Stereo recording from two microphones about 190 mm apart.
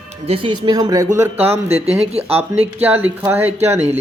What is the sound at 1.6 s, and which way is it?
Speech, 35° right (ahead or behind).